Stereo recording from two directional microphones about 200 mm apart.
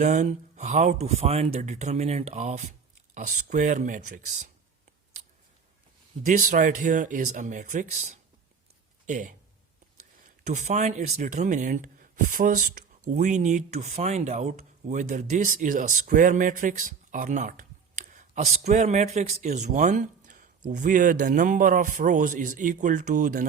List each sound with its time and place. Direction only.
0.0 s speech: 40° right (ahead or behind)
6.2 s speech: 40° right (ahead or behind)
9.0 s speech: 40° right (ahead or behind)
10.4 s speech: 35° right (ahead or behind)